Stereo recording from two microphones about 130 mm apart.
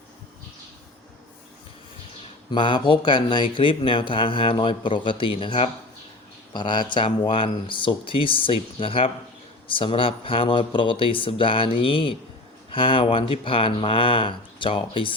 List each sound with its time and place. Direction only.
2.5 s speech: 35° left (ahead or behind)